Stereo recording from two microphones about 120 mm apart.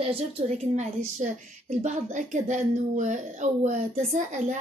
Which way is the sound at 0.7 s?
85° right.